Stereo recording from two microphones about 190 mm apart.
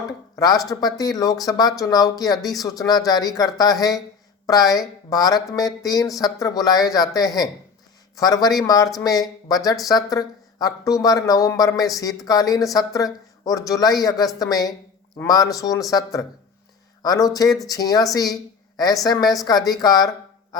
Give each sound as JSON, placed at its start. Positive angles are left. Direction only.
{"t": 0.3, "sound": "speech", "side_deg": 20}